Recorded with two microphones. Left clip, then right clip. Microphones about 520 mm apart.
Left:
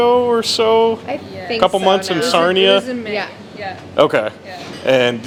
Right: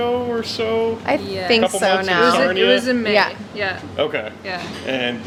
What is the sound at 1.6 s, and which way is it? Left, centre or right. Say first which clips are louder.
Speech: left 4 dB; left.